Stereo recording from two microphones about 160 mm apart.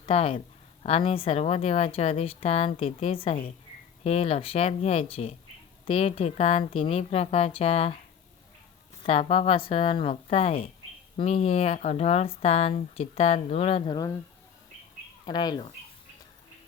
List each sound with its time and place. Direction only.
0.0 s speech: 35° left (ahead or behind)
9.0 s speech: 35° left (ahead or behind)
15.3 s speech: 25° left (ahead or behind)